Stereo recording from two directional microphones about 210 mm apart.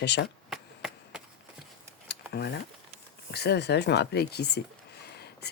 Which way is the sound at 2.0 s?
50° left (ahead or behind).